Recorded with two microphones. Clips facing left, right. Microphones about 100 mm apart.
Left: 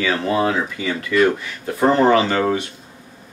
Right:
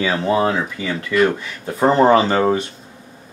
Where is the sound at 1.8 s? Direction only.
20° right (ahead or behind).